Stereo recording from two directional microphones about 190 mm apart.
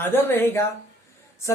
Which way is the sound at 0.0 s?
10° left (ahead or behind).